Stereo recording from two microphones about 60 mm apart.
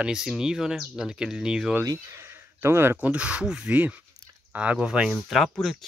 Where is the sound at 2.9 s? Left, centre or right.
Right.